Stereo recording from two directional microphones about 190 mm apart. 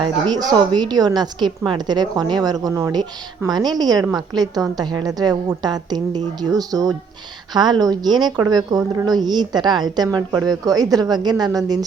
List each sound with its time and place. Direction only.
0.7 s a woman's voice: 20° right (ahead or behind)